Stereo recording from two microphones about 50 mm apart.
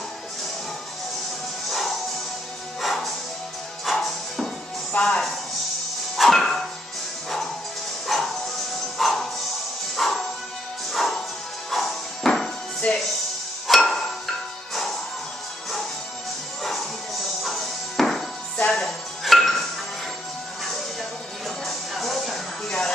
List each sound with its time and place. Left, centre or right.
1.7 s music: centre
4.9 s speech: centre
6.1 s music: centre
8.1 s music: centre
12.8 s music: left
13.7 s music: centre
16.6 s music: centre
21.6 s music: centre
22.7 s a sound: centre